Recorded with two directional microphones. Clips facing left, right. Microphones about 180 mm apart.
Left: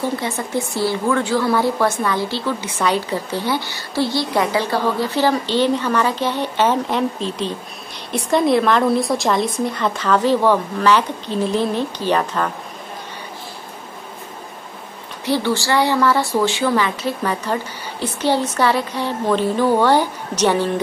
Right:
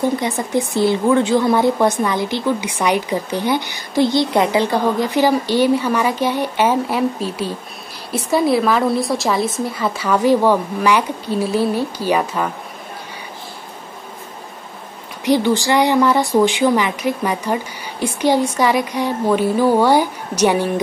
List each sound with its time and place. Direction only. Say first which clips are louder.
0.2 s a woman's voice: right 3 dB; 15° right (ahead or behind)
15.2 s a woman's voice: right 4 dB; 15° right (ahead or behind)